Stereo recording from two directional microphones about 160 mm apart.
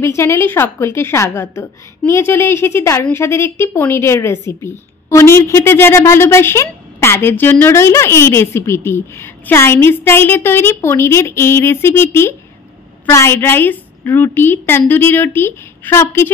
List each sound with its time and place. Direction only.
0.0 s a woman's voice: 15° left (ahead or behind)